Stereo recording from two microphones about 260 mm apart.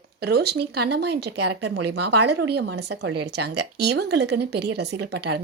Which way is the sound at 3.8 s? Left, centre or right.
Right.